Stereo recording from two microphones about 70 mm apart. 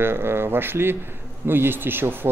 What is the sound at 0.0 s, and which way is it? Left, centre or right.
Speech, right.